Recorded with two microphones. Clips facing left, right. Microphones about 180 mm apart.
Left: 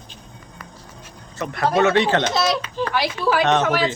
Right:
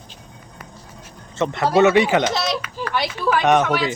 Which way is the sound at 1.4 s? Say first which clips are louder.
Right 3 dB; 20° right (ahead or behind).